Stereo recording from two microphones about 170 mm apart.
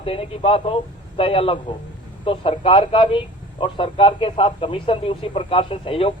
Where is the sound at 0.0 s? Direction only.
35° left (ahead or behind).